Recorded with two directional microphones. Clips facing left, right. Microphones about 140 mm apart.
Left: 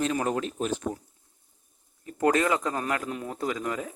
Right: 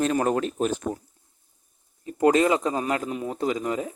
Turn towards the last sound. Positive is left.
turn(degrees=-20)  # may be behind; listen again after turning